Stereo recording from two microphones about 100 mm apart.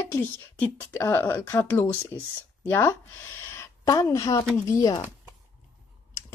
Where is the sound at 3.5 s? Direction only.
30° left (ahead or behind).